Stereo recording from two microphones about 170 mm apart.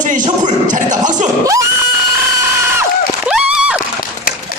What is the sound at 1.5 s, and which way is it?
Neigh, 20° right (ahead or behind).